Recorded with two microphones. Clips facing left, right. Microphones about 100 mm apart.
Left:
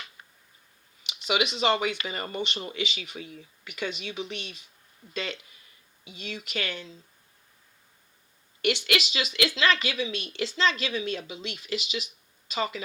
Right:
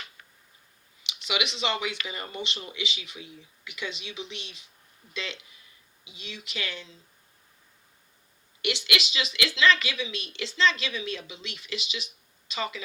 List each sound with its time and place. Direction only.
1.0 s speech: 40° left (ahead or behind)
8.6 s speech: 40° left (ahead or behind)